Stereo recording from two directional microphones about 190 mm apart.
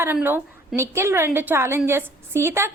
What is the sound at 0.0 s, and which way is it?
A woman's voice, 10° right (ahead or behind).